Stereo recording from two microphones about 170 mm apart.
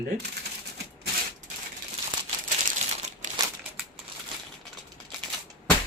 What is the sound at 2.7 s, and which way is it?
Crumpling, 45° right (ahead or behind).